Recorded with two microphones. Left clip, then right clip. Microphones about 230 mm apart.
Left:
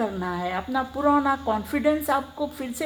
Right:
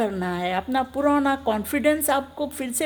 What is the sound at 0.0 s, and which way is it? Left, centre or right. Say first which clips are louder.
A woman's voice: right 2 dB; right.